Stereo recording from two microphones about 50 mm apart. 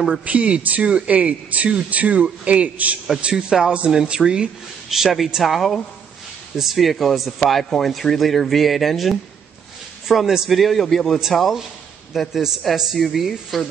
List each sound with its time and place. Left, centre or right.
0.2 s speech: right
3.2 s a man's voice: centre
4.8 s speech: centre
12.1 s speech: centre